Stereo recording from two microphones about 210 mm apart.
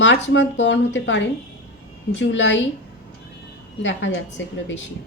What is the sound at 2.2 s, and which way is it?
Speech, 60° left (ahead or behind).